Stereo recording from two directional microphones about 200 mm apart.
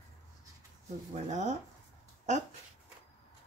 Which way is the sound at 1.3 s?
35° right (ahead or behind).